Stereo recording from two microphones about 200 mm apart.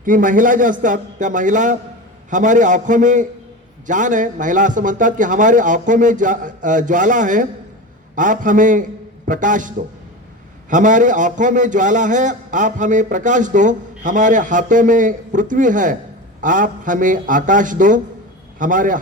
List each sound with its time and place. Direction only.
0.0 s a man's voice: 40° right (ahead or behind)